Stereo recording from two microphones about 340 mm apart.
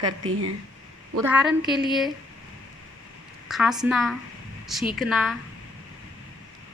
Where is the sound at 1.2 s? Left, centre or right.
Centre.